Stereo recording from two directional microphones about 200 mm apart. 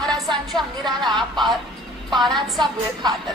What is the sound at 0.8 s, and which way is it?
Speech, 20° right (ahead or behind).